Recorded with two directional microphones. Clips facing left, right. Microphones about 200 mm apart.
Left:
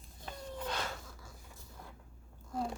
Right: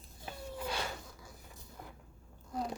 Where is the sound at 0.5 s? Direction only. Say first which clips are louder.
Even; 10° right (ahead or behind).